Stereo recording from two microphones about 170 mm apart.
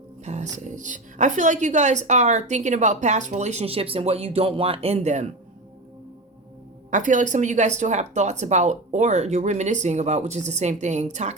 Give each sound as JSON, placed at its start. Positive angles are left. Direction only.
{"t": 0.3, "sound": "a woman's voice", "side_deg": -45}
{"t": 6.9, "sound": "a woman's voice", "side_deg": -45}